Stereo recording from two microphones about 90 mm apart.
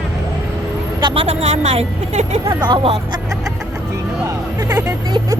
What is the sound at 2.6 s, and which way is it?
Speech, 75° right (ahead or behind).